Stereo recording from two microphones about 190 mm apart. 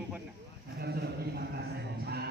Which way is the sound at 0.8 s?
55° right (ahead or behind).